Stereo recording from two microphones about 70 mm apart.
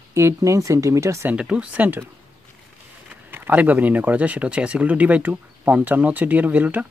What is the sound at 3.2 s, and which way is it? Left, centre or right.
Speech, right.